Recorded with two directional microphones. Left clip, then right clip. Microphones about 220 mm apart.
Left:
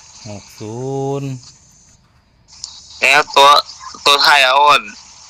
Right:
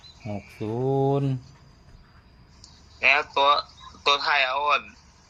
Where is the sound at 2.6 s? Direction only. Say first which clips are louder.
Left 7 dB; 40° left (ahead or behind).